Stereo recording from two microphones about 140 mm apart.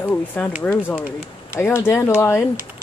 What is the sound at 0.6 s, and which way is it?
Speech, 15° left (ahead or behind).